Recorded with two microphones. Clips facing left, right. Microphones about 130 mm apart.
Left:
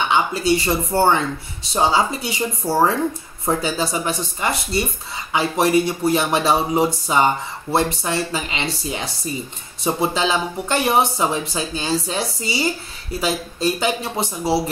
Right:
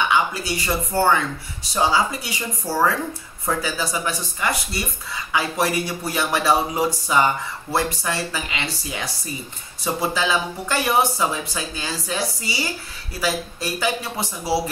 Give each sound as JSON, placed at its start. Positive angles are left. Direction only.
{"t": 0.1, "sound": "speech", "side_deg": 25}